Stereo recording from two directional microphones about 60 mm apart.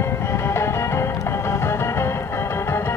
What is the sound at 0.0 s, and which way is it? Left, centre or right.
Music, left.